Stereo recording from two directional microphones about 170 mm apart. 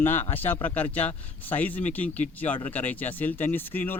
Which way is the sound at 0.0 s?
15° left (ahead or behind).